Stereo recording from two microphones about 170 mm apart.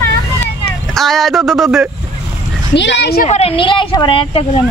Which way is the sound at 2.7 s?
90° left.